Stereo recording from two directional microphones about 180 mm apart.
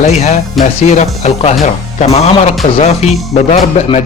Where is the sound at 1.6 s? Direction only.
35° left (ahead or behind).